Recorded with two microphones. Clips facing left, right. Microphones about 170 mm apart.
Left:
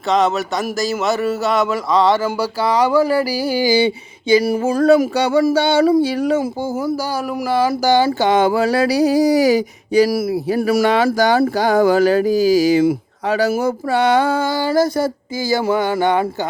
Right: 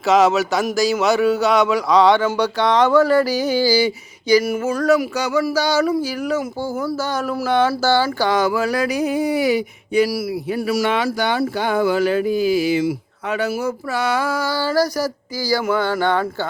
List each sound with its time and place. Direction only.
0.1 s speech: centre (ahead or behind)
3.7 s speech: 25° left (ahead or behind)
5.5 s a sound: 25° left (ahead or behind)
7.4 s speech: 5° left (ahead or behind)
7.7 s speech: 15° left (ahead or behind); by 10.8 s 50° left (ahead or behind)
10.8 s speech: 35° left (ahead or behind)
13.2 s a sound: 35° left (ahead or behind); by 16.2 s 15° left (ahead or behind)